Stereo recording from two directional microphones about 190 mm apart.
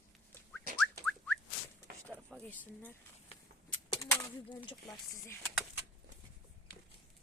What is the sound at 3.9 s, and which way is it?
Speech, 15° left (ahead or behind).